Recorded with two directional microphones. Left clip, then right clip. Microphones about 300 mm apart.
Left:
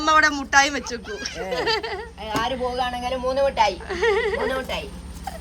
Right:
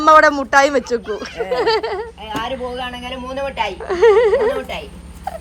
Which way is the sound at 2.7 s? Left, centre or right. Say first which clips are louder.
Left 1 dB; left.